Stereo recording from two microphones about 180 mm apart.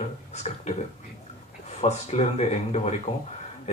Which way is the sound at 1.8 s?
40° left (ahead or behind).